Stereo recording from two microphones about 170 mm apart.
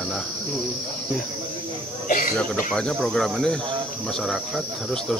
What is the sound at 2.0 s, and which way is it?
Cricket, 55° left (ahead or behind).